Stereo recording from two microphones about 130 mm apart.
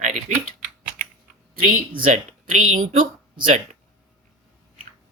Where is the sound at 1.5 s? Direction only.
90° right.